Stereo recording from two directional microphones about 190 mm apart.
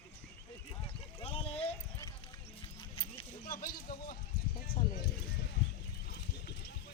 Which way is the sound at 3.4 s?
50° left (ahead or behind).